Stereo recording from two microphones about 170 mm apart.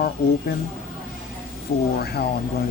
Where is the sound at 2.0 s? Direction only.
70° left (ahead or behind).